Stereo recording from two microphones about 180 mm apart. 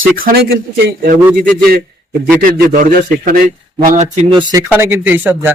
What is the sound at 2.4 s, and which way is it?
Speech, 50° right (ahead or behind).